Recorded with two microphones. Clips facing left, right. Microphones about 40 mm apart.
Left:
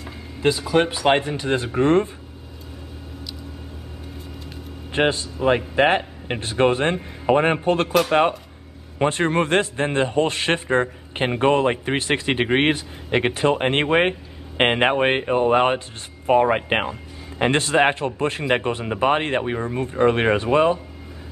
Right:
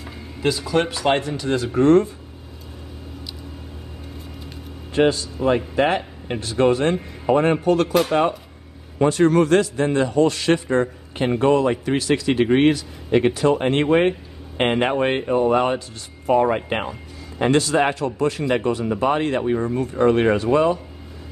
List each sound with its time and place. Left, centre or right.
0.4 s speech: centre; by 2.0 s left
4.9 s a man's voice: left
8.9 s a man's voice: left